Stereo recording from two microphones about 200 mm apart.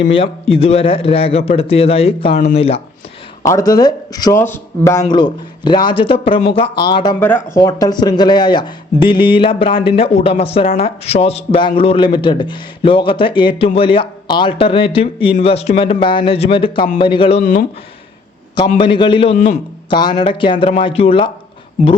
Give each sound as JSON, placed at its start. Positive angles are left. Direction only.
{"t": 0.1, "sound": "speech", "side_deg": 30}
{"t": 3.7, "sound": "speech", "side_deg": 20}
{"t": 18.8, "sound": "speech", "side_deg": 25}
{"t": 19.9, "sound": "speech", "side_deg": 20}